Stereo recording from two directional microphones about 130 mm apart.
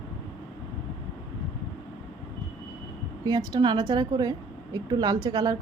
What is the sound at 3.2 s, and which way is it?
A woman's voice, 30° right (ahead or behind).